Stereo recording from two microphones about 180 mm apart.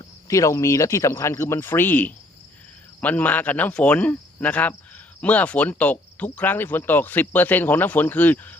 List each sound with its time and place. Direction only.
0.3 s cricket: 15° left (ahead or behind)